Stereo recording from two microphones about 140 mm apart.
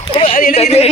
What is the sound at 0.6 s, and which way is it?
Speech, 50° left (ahead or behind).